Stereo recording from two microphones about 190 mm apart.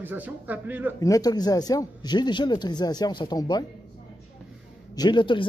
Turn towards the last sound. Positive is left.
turn(degrees=25)  # may be behind; listen again after turning